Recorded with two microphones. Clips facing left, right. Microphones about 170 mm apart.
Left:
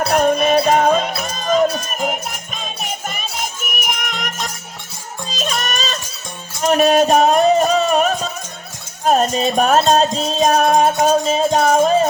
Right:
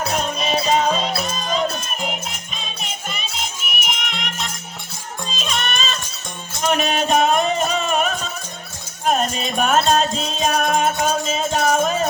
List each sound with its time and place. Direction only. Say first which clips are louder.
0.1 s music: left 12 dB; 55° left (ahead or behind); by 12.0 s 35° left (ahead or behind)